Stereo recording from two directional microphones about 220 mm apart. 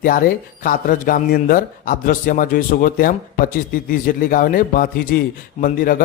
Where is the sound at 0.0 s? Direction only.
40° left (ahead or behind).